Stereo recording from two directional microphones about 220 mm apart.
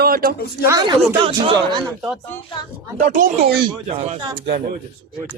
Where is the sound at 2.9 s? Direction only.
40° right (ahead or behind).